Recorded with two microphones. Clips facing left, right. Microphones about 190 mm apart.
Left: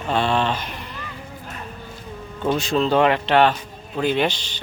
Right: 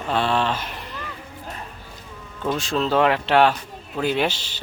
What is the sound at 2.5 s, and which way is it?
Speech, centre (ahead or behind).